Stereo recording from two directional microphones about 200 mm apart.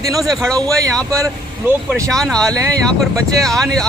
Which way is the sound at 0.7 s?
15° right (ahead or behind).